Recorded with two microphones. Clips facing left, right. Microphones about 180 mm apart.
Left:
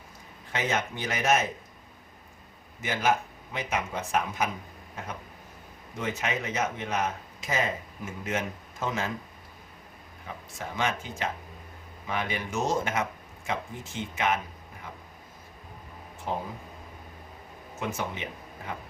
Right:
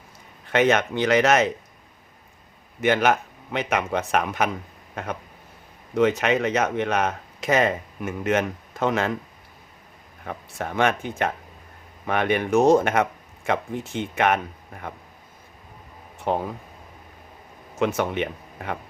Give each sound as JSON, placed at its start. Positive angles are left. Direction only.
{"t": 0.4, "sound": "speech", "side_deg": -70}
{"t": 2.8, "sound": "speech", "side_deg": -70}
{"t": 10.2, "sound": "speech", "side_deg": -60}
{"t": 16.3, "sound": "speech", "side_deg": -70}
{"t": 17.7, "sound": "speech", "side_deg": -75}